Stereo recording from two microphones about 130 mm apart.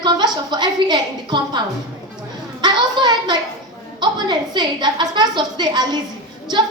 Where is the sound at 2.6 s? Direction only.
35° right (ahead or behind).